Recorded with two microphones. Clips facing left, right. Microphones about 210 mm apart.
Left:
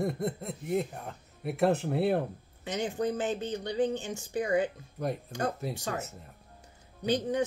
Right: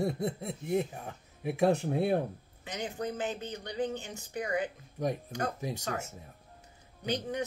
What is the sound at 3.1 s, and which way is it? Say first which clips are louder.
Speech: left 5 dB; 25° left (ahead or behind).